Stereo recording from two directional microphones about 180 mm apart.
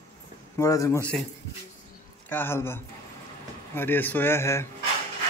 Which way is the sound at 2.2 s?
10° left (ahead or behind).